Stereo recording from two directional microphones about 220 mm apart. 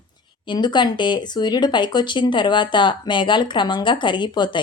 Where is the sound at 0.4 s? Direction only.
20° left (ahead or behind).